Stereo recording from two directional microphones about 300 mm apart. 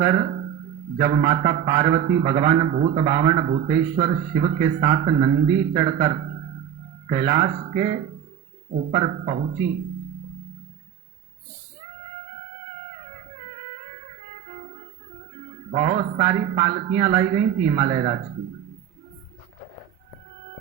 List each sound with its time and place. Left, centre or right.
0.0 s a man's voice: centre
15.7 s a man's voice: right